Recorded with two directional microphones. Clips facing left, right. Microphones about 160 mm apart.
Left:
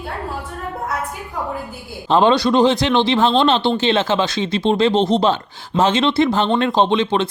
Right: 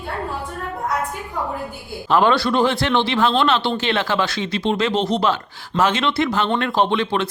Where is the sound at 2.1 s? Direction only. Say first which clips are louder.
Left 3 dB; 20° left (ahead or behind).